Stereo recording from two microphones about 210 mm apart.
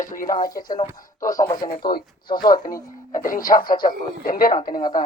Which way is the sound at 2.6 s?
40° left (ahead or behind).